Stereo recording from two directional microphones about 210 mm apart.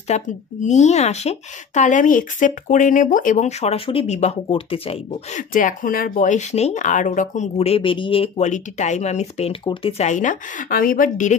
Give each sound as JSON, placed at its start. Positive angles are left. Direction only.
{"t": 0.1, "sound": "speech", "side_deg": 35}